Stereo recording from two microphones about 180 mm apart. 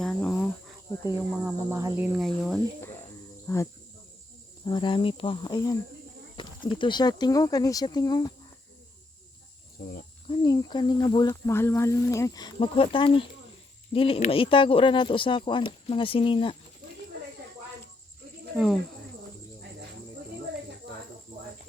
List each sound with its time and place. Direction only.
0.0 s cricket: 5° left (ahead or behind)
1.5 s speech: 15° right (ahead or behind)
2.0 s speech: centre (ahead or behind)
3.4 s speech: 15° left (ahead or behind)
10.2 s speech: 30° left (ahead or behind)
18.5 s speech: centre (ahead or behind)